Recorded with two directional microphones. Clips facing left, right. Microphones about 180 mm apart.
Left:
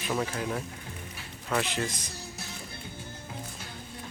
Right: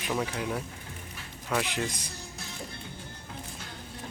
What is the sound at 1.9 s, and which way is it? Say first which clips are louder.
Speech: even; 10° right (ahead or behind).